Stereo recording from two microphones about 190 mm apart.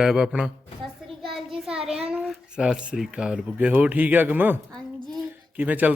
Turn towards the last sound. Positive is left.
turn(degrees=-10)  # may be behind; listen again after turning